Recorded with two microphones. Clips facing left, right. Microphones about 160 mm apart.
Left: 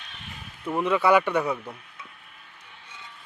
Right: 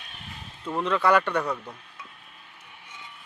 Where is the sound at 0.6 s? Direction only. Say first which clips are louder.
Left 2 dB; 10° left (ahead or behind).